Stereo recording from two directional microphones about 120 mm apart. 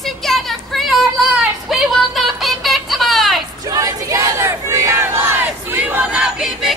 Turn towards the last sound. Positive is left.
turn(degrees=-5)  # may be behind; listen again after turning